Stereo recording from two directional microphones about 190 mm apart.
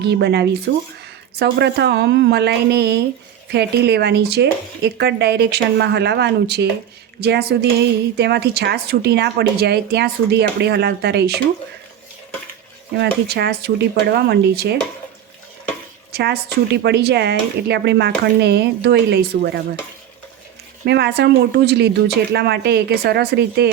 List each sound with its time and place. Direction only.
0.0 s a woman's voice: 60° right (ahead or behind)
13.0 s a woman's voice: 60° right (ahead or behind)
16.1 s a woman's voice: 60° right (ahead or behind)
20.8 s a woman's voice: 60° right (ahead or behind)